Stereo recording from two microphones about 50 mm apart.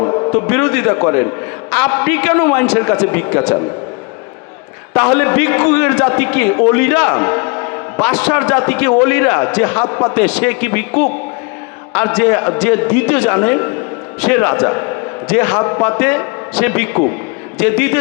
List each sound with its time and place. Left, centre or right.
0.3 s a man's voice: left
4.9 s a man's voice: left
10.0 s a man's voice: left
10.2 s a man's voice: left
14.7 s a sound: left
15.3 s a man's voice: left